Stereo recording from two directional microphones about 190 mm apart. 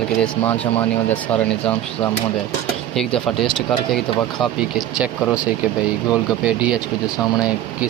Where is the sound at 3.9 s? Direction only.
Centre (ahead or behind).